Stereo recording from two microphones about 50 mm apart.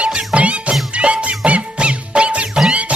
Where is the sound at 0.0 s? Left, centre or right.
Right.